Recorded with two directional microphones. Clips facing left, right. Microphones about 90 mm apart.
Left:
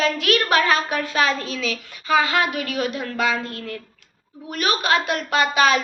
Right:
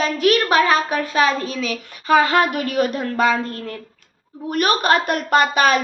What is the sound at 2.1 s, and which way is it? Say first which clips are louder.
A woman's voice: right 4 dB; 45° right (ahead or behind).